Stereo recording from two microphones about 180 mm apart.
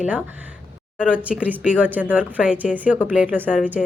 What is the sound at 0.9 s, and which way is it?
A woman's voice, 5° right (ahead or behind).